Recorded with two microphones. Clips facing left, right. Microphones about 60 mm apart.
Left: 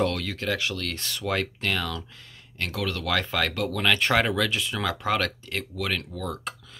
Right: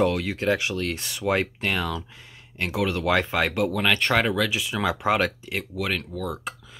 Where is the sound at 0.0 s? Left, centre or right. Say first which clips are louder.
Right 4 dB; centre.